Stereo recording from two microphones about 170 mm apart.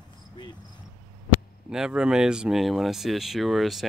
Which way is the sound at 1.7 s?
5° right (ahead or behind).